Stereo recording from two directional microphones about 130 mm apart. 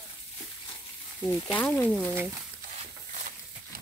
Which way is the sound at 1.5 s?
15° left (ahead or behind).